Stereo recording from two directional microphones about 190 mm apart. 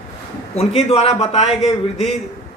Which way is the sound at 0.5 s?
30° left (ahead or behind).